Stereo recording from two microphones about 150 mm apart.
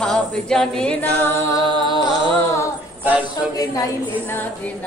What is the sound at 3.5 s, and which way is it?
Speech, 25° left (ahead or behind).